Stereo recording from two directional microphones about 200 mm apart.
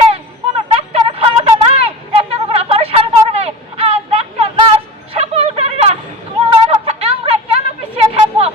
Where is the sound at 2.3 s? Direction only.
30° right (ahead or behind).